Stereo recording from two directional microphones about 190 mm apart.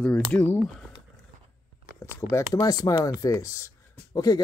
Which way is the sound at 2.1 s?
15° left (ahead or behind).